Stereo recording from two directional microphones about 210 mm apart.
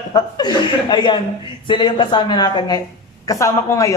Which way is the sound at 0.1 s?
20° left (ahead or behind).